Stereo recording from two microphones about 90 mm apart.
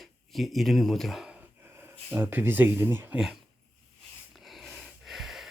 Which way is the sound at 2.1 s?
20° right (ahead or behind).